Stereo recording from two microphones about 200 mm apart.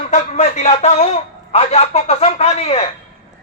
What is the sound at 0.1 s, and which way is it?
A man's voice, 35° left (ahead or behind).